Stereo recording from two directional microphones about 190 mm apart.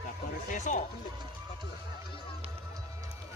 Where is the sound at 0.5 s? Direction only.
40° left (ahead or behind).